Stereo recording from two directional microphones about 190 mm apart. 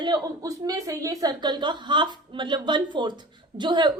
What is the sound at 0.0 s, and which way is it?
A woman's voice, 20° right (ahead or behind).